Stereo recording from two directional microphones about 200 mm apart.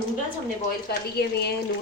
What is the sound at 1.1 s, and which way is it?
Speech, 55° left (ahead or behind).